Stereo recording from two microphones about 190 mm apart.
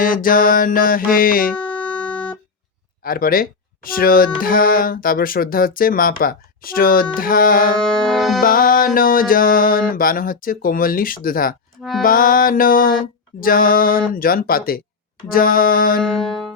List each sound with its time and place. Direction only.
0.0 s speech: 45° left (ahead or behind)
1.5 s music: 5° left (ahead or behind)
3.0 s speech: 50° left (ahead or behind)
7.8 s music: 5° left (ahead or behind)
8.4 s speech: 50° left (ahead or behind)
11.8 s music: centre (ahead or behind)
12.0 s speech: 45° left (ahead or behind)
16.0 s music: 5° left (ahead or behind)